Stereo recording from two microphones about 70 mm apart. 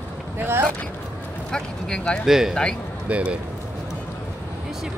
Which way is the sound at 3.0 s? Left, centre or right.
Centre.